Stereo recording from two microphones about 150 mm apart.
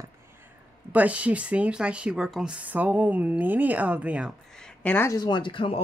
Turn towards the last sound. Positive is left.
turn(degrees=35)  # may be behind; listen again after turning